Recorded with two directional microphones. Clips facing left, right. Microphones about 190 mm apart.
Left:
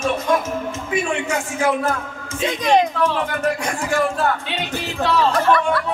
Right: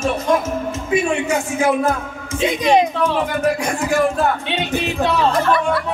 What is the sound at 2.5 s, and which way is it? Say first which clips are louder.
Speech: right 2 dB; 10° right (ahead or behind).